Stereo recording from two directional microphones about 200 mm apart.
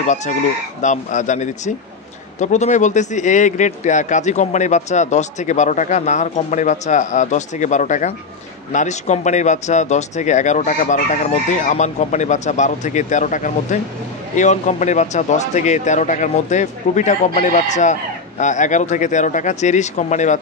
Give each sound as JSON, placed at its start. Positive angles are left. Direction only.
{"t": 0.0, "sound": "speech", "side_deg": 35}